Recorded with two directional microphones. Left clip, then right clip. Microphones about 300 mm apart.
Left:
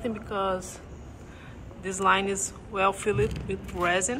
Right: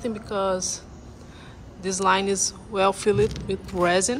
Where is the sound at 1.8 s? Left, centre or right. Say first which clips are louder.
Right 3 dB; centre.